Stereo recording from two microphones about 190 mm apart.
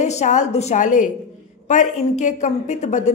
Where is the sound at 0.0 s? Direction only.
35° left (ahead or behind).